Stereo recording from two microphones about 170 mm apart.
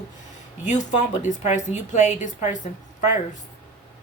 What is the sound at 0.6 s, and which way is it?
A woman's voice, 45° left (ahead or behind).